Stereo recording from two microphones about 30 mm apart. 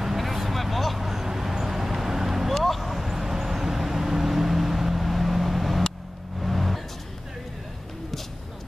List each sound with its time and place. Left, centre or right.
0.2 s vehicle: centre
2.5 s vehicle: centre
2.8 s vehicle: centre